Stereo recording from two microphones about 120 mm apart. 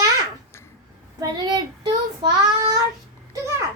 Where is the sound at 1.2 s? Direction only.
35° right (ahead or behind).